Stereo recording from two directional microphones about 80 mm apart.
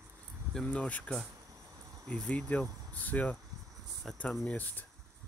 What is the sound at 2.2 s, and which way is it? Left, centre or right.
Speech, centre.